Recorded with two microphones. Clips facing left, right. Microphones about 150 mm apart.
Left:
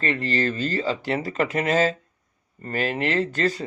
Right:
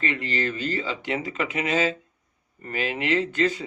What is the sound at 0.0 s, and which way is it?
Speech, 35° left (ahead or behind).